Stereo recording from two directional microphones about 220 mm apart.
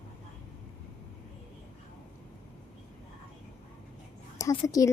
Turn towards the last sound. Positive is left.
turn(degrees=15)  # may be behind; listen again after turning